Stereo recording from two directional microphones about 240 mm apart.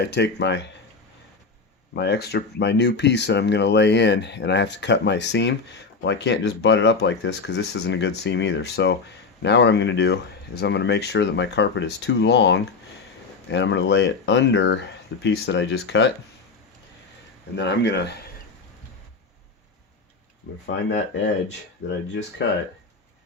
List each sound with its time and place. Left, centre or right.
0.0 s speech: left
2.0 s speech: left
17.6 s speech: left
20.7 s speech: left